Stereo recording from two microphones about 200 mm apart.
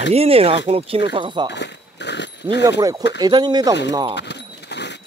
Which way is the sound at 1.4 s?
60° left (ahead or behind).